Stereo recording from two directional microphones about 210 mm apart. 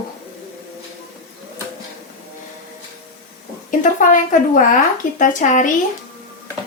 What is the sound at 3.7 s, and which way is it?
A woman's voice, 40° left (ahead or behind).